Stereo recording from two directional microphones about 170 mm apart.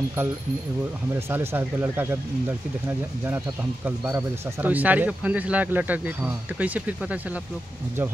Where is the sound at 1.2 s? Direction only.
15° right (ahead or behind).